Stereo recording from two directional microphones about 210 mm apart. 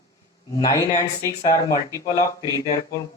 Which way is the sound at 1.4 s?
15° left (ahead or behind).